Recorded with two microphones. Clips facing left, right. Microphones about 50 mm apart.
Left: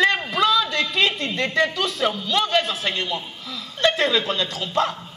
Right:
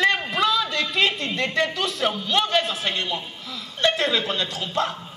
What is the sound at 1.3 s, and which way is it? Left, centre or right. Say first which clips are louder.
Speech: left 2 dB; left.